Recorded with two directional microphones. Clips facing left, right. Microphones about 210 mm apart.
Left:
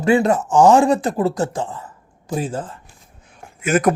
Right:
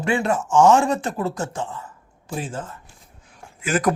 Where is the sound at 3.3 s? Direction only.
20° left (ahead or behind).